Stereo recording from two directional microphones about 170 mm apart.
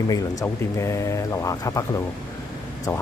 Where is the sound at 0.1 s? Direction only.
20° left (ahead or behind).